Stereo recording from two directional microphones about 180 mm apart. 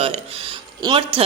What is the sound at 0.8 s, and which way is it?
Speech, 20° right (ahead or behind).